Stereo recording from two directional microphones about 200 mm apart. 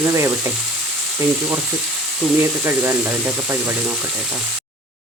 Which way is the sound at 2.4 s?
10° right (ahead or behind).